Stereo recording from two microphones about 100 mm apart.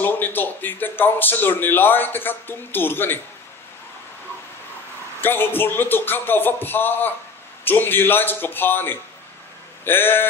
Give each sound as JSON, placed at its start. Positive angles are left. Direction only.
{"t": 0.0, "sound": "speech", "side_deg": 20}
{"t": 5.2, "sound": "speech", "side_deg": 20}